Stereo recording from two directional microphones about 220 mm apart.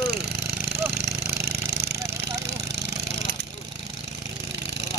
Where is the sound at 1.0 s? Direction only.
50° right (ahead or behind).